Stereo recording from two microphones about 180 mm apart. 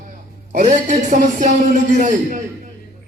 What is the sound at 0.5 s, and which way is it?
A man's voice, 45° right (ahead or behind).